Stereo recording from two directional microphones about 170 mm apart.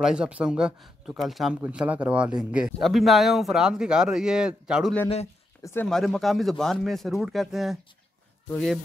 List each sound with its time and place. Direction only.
0.0 s speech: 5° right (ahead or behind)
5.6 s speech: 15° left (ahead or behind)
5.9 s speech: centre (ahead or behind)